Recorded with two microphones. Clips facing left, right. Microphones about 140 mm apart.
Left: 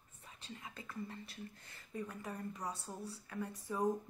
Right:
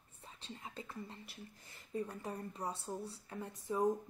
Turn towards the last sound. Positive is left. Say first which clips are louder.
# right 2 dB
turn(degrees=-25)  # may be behind; listen again after turning